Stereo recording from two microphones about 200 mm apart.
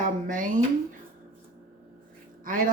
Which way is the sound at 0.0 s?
40° right (ahead or behind).